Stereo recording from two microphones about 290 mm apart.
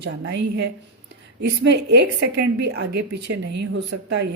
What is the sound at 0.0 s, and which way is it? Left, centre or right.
Speech, right.